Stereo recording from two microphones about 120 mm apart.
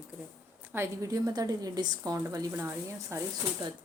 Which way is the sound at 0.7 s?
25° right (ahead or behind).